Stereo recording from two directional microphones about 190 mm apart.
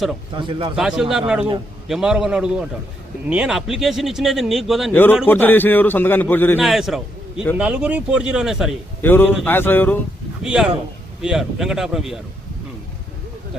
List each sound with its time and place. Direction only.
0.3 s a man's voice: 25° right (ahead or behind)
0.8 s speech: 5° right (ahead or behind)
5.2 s a man's voice: 10° left (ahead or behind)
6.6 s a man's voice: centre (ahead or behind)
9.0 s a man's voice: 10° left (ahead or behind)
10.4 s speech: 5° right (ahead or behind)